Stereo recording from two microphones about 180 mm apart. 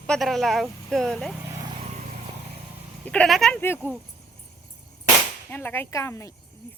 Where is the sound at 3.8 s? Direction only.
15° left (ahead or behind).